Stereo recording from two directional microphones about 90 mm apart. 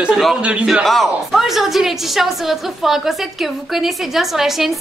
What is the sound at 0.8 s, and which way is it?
A woman's voice, centre (ahead or behind).